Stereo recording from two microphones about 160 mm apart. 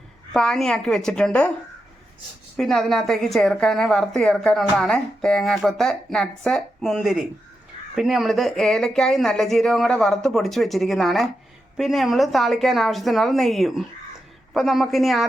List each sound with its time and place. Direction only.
0.3 s a woman's voice: 5° left (ahead or behind)
2.6 s a woman's voice: centre (ahead or behind)